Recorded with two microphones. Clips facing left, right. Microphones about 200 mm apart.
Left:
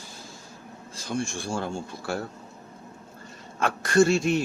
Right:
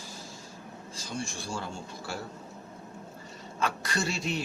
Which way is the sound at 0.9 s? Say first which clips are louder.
Left 7 dB; 55° left (ahead or behind).